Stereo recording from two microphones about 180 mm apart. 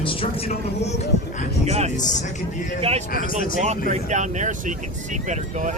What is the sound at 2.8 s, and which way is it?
A man's voice, 35° right (ahead or behind).